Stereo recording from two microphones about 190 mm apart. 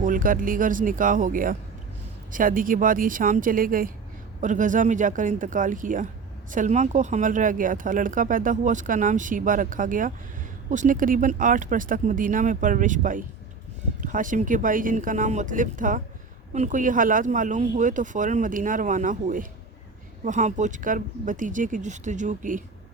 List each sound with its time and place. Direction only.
0.0 s speech: 45° right (ahead or behind)